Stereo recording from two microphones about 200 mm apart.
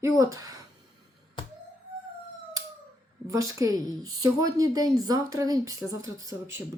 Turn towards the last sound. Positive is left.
turn(degrees=-15)  # may be behind; listen again after turning